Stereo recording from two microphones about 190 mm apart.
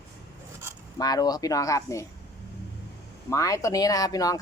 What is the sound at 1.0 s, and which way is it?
Speech, 20° left (ahead or behind).